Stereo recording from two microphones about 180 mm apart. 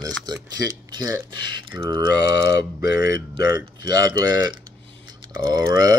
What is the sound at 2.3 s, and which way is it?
Speech, 70° left (ahead or behind).